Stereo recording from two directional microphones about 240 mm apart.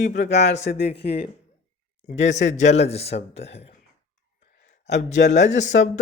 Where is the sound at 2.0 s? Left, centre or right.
Left.